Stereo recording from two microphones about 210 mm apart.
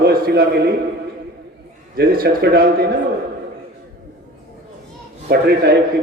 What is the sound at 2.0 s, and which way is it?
Speech, 50° right (ahead or behind).